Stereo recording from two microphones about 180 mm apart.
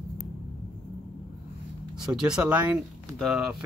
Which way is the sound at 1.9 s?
5° right (ahead or behind).